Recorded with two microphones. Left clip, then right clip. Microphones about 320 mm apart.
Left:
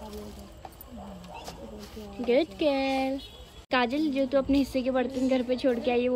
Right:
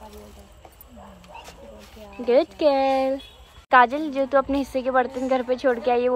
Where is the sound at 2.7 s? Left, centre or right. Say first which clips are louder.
Right 7 dB; centre.